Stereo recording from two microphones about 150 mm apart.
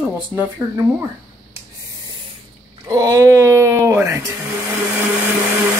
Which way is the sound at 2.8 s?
20° right (ahead or behind).